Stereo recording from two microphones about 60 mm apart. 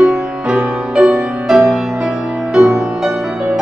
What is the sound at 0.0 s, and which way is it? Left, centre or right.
Music, centre.